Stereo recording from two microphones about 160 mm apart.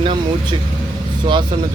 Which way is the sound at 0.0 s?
30° right (ahead or behind).